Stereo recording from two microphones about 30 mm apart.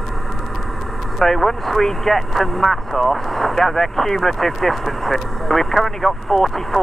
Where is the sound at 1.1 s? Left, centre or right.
Centre.